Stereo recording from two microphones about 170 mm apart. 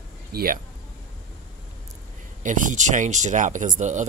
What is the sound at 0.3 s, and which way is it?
Speech, 60° right (ahead or behind).